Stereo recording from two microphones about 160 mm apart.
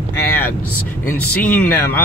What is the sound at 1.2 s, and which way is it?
Speech, 10° left (ahead or behind).